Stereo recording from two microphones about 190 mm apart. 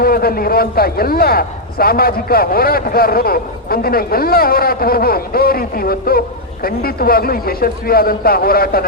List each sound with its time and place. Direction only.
0.0 s a man's voice: 55° left (ahead or behind)